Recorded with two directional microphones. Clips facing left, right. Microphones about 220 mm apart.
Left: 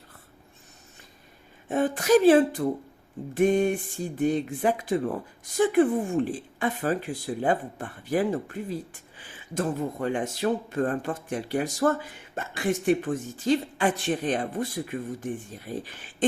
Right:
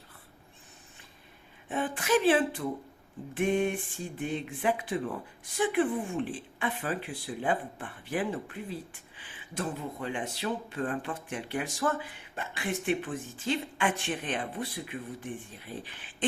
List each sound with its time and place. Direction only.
1.6 s speech: 40° left (ahead or behind)